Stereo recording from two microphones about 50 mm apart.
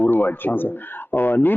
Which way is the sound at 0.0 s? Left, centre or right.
Left.